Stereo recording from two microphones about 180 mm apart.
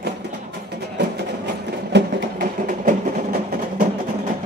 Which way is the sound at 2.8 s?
50° right (ahead or behind).